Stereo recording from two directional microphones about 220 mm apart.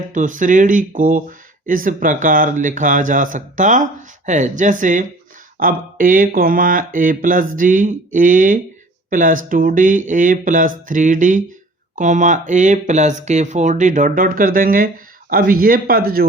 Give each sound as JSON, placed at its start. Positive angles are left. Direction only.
{"t": 0.1, "sound": "speech", "side_deg": -35}